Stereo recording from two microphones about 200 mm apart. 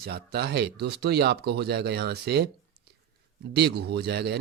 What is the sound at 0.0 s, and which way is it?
Speech, 50° right (ahead or behind).